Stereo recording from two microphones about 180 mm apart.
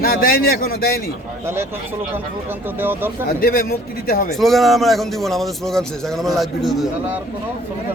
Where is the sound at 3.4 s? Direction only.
55° left (ahead or behind).